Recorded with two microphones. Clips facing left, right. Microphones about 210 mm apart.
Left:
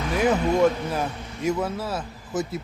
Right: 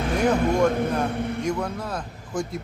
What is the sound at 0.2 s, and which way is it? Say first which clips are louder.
Speech: left 1 dB; 5° left (ahead or behind).